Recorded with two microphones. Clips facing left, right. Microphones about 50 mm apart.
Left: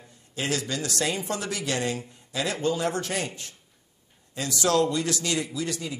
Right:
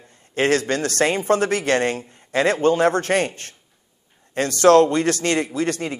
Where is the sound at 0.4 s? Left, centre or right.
Right.